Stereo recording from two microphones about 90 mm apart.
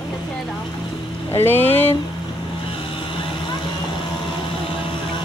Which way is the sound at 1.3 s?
25° left (ahead or behind).